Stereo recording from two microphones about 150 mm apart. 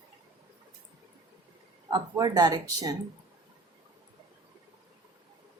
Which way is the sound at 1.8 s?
25° right (ahead or behind).